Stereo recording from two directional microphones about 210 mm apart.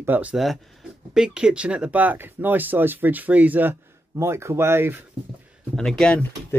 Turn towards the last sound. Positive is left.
turn(degrees=5)  # may be behind; listen again after turning